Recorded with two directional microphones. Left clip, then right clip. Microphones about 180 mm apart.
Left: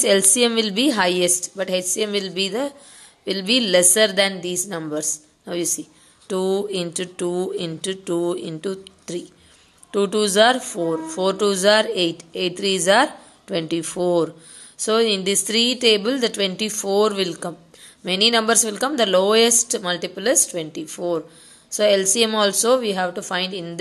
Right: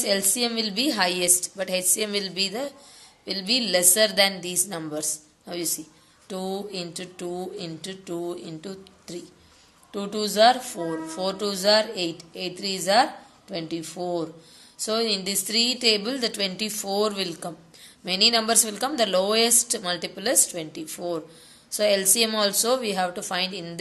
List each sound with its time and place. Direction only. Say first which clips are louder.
0.0 s a woman's voice: left 8 dB; 45° left (ahead or behind)